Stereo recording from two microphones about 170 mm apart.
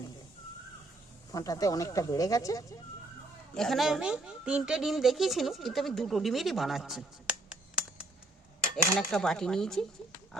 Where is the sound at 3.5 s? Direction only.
Centre (ahead or behind).